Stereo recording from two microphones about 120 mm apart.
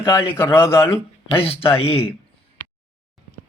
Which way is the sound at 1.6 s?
50° left (ahead or behind).